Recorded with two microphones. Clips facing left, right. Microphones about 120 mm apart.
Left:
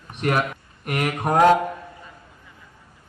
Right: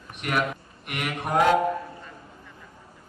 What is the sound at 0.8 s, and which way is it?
Mantra, 45° left (ahead or behind).